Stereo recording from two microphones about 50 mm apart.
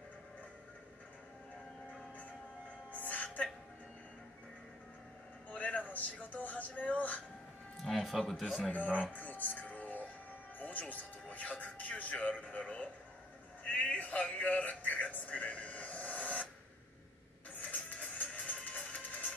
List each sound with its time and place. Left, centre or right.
2.9 s music: left
5.5 s a sound: left
7.7 s music: centre
8.0 s speech: centre
8.7 s speech: left
9.1 s music: left
17.6 s printer: left
18.1 s music: left